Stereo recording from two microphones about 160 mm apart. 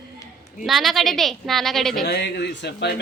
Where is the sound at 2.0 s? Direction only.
90° left.